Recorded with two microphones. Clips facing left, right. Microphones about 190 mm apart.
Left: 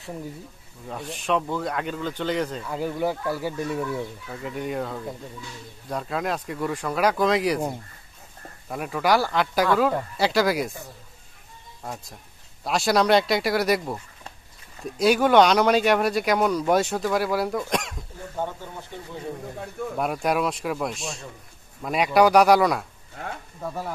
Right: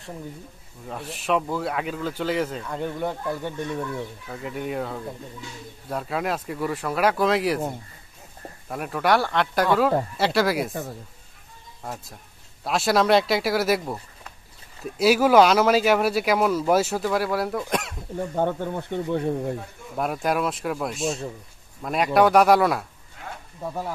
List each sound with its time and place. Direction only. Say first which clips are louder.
0.8 s speech: even; centre (ahead or behind)
11.8 s speech: even; centre (ahead or behind)
15.0 s speech: right 1 dB; 5° right (ahead or behind)
18.3 s speech: right 6 dB; 60° right (ahead or behind)
20.0 s speech: even; centre (ahead or behind)
23.6 s speech: right 1 dB; 15° right (ahead or behind)